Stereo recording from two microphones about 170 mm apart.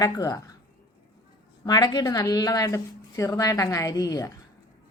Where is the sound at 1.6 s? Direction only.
25° left (ahead or behind).